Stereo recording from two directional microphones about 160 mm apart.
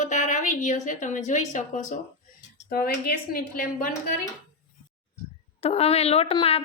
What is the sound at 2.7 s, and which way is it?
A woman's voice, 75° left (ahead or behind).